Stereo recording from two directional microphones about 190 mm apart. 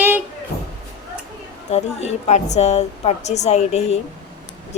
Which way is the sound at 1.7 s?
35° left (ahead or behind).